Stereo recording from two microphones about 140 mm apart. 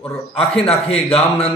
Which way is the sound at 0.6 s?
45° left (ahead or behind).